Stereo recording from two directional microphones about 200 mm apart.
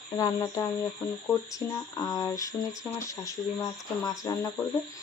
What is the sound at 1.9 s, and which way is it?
Speech, 20° left (ahead or behind).